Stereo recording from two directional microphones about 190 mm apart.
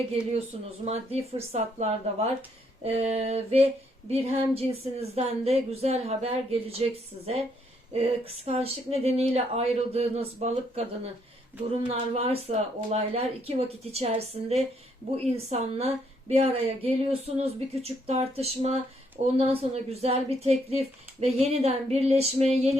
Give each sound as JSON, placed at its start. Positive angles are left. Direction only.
{"t": 0.9, "sound": "speech", "side_deg": -35}